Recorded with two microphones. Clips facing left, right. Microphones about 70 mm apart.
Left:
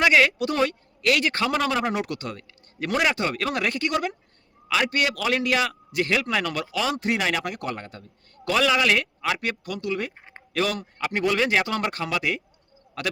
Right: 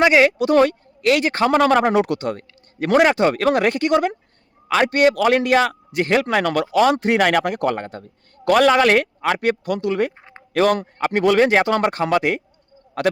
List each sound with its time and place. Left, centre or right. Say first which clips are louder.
0.0 s speech: right 5 dB; right
1.5 s speech: right 12 dB; right
1.9 s a man's voice: right 9 dB; right
6.4 s speech: right 10 dB; right
7.2 s speech: right 9 dB; right
7.4 s a man's voice: right 9 dB; right
11.9 s a man's voice: right 8 dB; right